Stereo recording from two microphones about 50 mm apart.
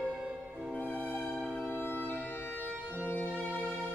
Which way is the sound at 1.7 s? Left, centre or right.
Left.